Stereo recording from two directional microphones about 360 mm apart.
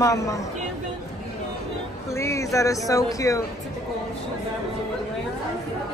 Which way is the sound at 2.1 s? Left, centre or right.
Centre.